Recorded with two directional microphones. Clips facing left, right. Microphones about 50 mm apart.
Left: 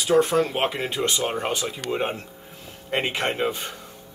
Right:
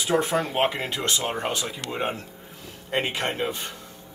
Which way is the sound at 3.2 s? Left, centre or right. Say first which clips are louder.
Left 3 dB; left.